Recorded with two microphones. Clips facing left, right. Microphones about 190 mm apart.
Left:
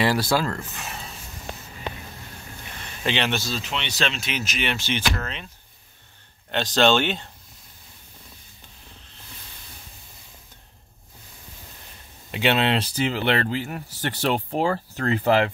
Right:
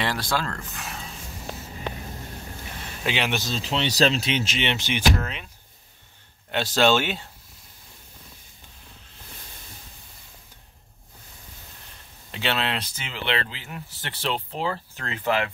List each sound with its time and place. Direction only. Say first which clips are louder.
0.0 s speech: left 5 dB; 5° left (ahead or behind)
3.0 s speech: left 2 dB; 10° right (ahead or behind)
3.6 s speech: right 6 dB; 35° right (ahead or behind); by 5.5 s 10° right (ahead or behind)
6.5 s speech: left 1 dB; 5° right (ahead or behind)
12.3 s speech: left 6 dB; 15° left (ahead or behind); by 15.5 s 35° left (ahead or behind)